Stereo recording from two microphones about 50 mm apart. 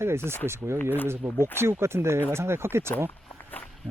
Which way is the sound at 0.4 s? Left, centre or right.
Right.